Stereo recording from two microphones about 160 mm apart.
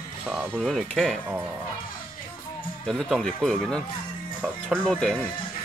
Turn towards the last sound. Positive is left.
turn(degrees=5)  # may be behind; listen again after turning